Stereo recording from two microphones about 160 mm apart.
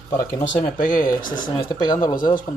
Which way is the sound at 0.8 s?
60° left (ahead or behind).